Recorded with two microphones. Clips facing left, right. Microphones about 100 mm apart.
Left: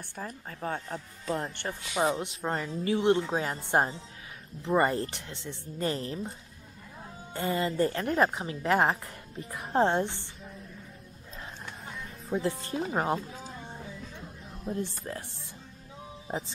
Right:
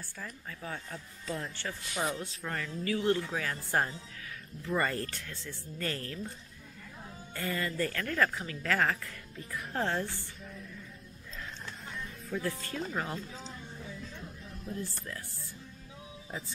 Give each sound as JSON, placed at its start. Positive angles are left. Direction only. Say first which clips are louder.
{"t": 0.2, "sound": "speech", "louder": "left 6 dB", "side_deg": 40}
{"t": 2.0, "sound": "a woman's voice", "louder": "left 7 dB", "side_deg": 20}
{"t": 7.3, "sound": "a woman's voice", "louder": "left 6 dB", "side_deg": 20}
{"t": 12.3, "sound": "a woman's voice", "louder": "left 5 dB", "side_deg": 25}
{"t": 13.2, "sound": "speech", "louder": "left 2 dB", "side_deg": 10}
{"t": 13.6, "sound": "music", "louder": "left 4 dB", "side_deg": 40}
{"t": 14.6, "sound": "speech", "louder": "left 6 dB", "side_deg": 30}